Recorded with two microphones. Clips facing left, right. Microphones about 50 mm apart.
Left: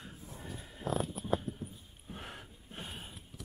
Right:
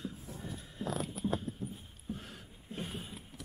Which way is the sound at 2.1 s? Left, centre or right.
Left.